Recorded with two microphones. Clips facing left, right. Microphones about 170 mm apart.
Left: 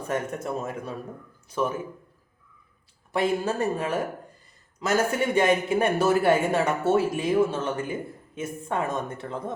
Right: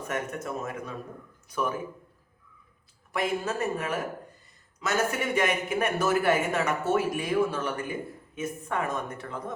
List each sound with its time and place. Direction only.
0.1 s a man's voice: 30° left (ahead or behind)
3.1 s a man's voice: 30° left (ahead or behind)